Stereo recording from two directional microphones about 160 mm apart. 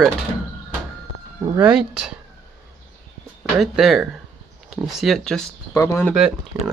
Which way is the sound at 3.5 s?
Centre (ahead or behind).